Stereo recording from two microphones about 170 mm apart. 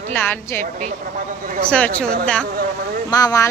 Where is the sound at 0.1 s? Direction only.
10° left (ahead or behind).